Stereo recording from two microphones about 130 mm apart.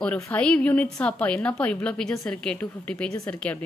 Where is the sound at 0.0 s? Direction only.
10° left (ahead or behind).